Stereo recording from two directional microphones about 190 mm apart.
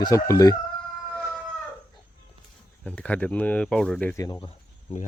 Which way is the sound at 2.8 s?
5° left (ahead or behind).